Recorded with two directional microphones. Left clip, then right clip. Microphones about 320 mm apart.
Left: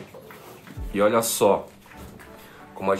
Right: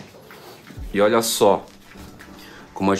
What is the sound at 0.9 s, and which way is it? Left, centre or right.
Speech, right.